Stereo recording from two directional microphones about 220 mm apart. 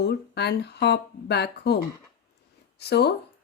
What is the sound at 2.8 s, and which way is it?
Speech, 50° left (ahead or behind).